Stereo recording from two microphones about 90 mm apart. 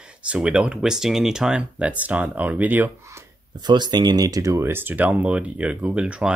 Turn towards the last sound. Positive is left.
turn(degrees=-10)  # may be behind; listen again after turning